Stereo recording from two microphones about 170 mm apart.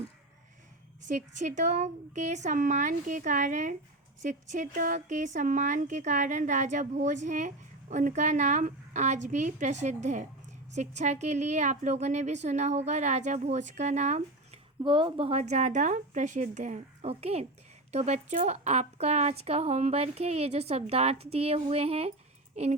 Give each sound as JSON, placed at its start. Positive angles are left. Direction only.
{"t": 1.0, "sound": "speech", "side_deg": -45}
{"t": 14.8, "sound": "speech", "side_deg": -30}